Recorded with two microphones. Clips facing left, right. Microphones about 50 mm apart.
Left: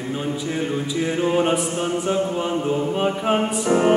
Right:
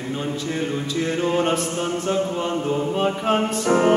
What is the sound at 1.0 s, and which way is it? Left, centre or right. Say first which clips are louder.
Mantra: left 1 dB; centre.